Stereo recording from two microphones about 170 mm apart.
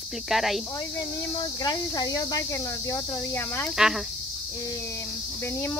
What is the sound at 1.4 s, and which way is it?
Speech, 25° left (ahead or behind).